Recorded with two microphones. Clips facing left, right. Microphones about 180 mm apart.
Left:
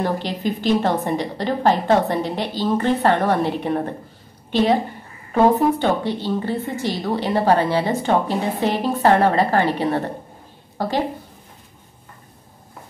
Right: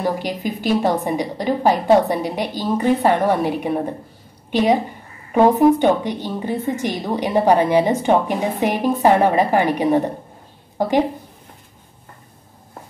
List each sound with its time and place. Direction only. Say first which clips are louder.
0.0 s a woman's voice: even; 10° right (ahead or behind)